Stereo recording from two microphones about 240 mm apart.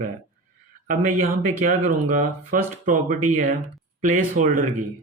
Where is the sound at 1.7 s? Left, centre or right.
Right.